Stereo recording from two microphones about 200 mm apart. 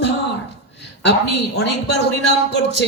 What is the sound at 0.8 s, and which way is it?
A woman's voice, 60° left (ahead or behind).